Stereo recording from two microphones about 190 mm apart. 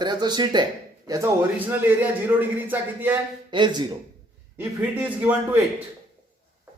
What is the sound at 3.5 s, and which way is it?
Speech, 25° right (ahead or behind).